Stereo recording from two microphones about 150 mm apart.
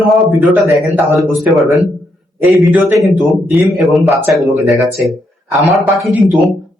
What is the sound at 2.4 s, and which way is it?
Speech, 15° right (ahead or behind).